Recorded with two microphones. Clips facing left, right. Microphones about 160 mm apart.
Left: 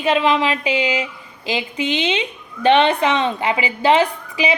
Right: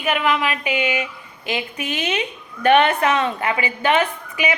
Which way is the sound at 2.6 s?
25° left (ahead or behind).